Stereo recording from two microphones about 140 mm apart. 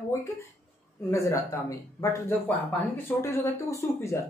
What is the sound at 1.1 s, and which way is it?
Speech, 20° left (ahead or behind).